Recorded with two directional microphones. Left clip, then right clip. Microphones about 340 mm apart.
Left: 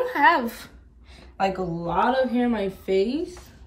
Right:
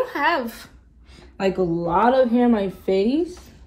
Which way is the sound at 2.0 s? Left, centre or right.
Centre.